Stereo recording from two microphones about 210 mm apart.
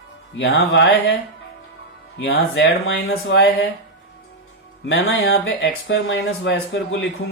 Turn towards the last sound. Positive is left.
turn(degrees=60)  # may be behind; listen again after turning